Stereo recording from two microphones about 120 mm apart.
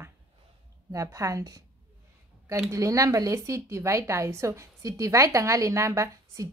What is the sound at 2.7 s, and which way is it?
Speech, 25° right (ahead or behind).